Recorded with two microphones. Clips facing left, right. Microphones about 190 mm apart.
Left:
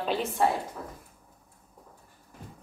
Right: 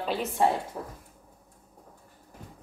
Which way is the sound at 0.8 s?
30° right (ahead or behind).